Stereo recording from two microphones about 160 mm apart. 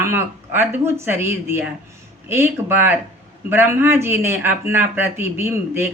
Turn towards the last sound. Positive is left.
turn(degrees=-15)  # may be behind; listen again after turning